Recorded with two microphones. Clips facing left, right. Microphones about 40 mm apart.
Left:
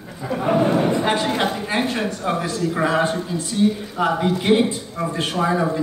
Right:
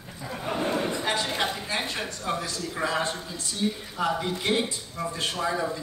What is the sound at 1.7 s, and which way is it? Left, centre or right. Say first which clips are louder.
A man's voice: left 8 dB; left.